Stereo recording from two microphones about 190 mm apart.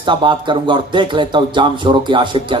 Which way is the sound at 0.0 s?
25° right (ahead or behind).